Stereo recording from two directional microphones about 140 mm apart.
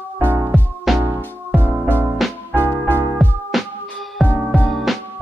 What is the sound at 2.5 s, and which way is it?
Music, 15° right (ahead or behind).